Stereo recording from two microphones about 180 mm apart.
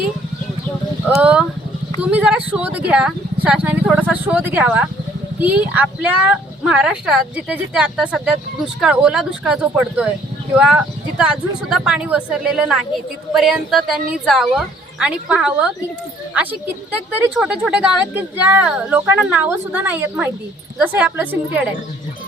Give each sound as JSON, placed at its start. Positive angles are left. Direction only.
{"t": 1.2, "sound": "a woman's voice", "side_deg": -5}
{"t": 11.2, "sound": "a woman's voice", "side_deg": -5}